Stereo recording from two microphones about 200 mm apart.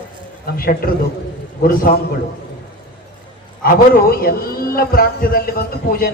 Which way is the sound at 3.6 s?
45° left (ahead or behind).